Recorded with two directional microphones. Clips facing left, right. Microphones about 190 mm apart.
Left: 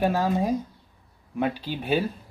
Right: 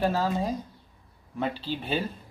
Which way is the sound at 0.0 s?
15° left (ahead or behind).